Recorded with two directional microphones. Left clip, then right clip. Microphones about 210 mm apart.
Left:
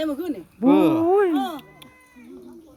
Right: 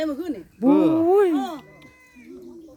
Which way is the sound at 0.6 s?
55° left (ahead or behind).